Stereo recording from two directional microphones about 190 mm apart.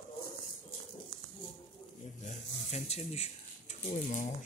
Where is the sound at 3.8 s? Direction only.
35° left (ahead or behind).